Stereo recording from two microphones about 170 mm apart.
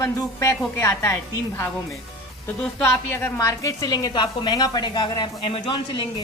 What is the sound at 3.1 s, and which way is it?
A woman's voice, 15° left (ahead or behind).